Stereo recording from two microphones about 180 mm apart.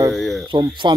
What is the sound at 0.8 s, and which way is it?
Speech, 25° right (ahead or behind).